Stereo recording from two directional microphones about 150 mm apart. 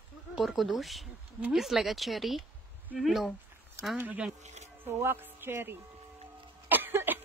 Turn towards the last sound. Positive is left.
turn(degrees=-15)  # may be behind; listen again after turning